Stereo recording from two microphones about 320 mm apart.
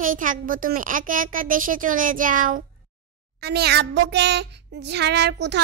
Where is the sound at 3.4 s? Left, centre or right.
Right.